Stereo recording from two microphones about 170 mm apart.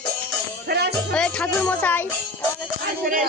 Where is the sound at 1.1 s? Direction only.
5° left (ahead or behind).